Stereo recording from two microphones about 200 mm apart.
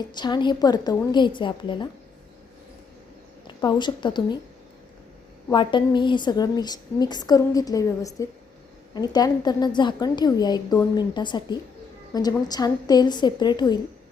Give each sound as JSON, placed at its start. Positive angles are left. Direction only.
{"t": 0.0, "sound": "a woman's voice", "side_deg": 20}
{"t": 3.4, "sound": "a woman's voice", "side_deg": 20}
{"t": 5.5, "sound": "a woman's voice", "side_deg": 20}